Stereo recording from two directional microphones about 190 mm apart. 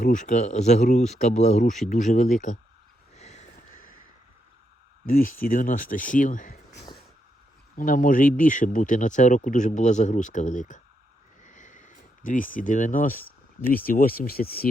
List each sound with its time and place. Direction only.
0.0 s speech: 40° left (ahead or behind)
3.2 s crow: 35° left (ahead or behind)
5.2 s speech: 45° left (ahead or behind)
7.8 s speech: 45° left (ahead or behind)